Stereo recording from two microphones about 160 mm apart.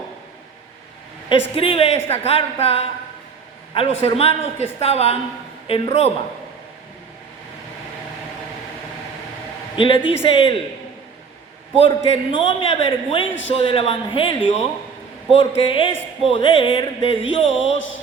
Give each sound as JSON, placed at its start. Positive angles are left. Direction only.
{"t": 1.3, "sound": "a man's voice", "side_deg": 35}
{"t": 9.7, "sound": "a man's voice", "side_deg": 30}
{"t": 11.8, "sound": "a man's voice", "side_deg": 35}